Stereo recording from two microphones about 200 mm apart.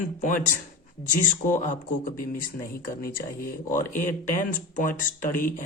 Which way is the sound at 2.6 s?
45° left (ahead or behind).